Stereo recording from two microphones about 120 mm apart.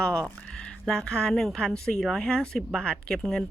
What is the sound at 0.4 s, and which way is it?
Speech, 5° left (ahead or behind).